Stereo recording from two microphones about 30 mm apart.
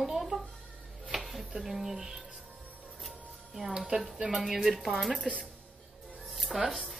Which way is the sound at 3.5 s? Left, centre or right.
Centre.